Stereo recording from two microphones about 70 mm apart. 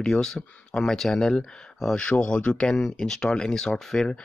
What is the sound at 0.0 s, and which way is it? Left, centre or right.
Speech, centre.